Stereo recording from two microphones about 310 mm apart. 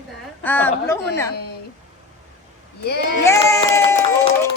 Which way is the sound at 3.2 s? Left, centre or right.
Centre.